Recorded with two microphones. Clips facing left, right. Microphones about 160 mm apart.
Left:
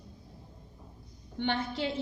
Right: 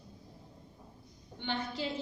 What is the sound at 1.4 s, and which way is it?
Speech, 65° left (ahead or behind).